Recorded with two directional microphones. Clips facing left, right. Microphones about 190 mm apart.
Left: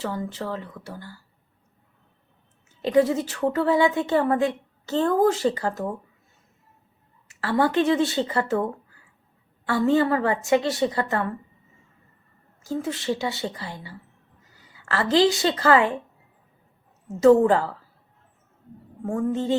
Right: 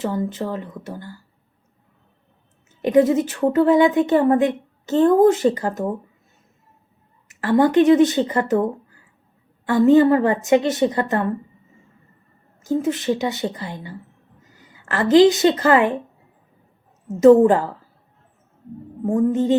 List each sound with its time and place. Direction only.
0.3 s a woman's voice: 20° right (ahead or behind)
2.8 s a woman's voice: 20° right (ahead or behind)
7.3 s a woman's voice: 20° right (ahead or behind)
12.6 s a woman's voice: 20° right (ahead or behind)
17.1 s a woman's voice: 20° right (ahead or behind)
19.0 s a woman's voice: 15° right (ahead or behind)